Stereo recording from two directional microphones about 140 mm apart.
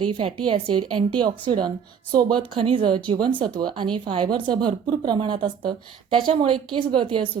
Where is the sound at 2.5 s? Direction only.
40° right (ahead or behind).